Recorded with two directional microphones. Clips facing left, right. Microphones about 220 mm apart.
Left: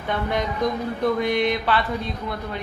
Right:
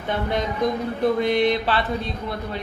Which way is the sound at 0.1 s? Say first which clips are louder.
Even; 25° right (ahead or behind).